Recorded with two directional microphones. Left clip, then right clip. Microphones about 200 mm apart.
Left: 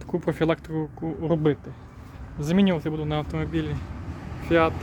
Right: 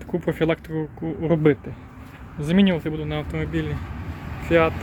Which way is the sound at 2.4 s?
5° left (ahead or behind).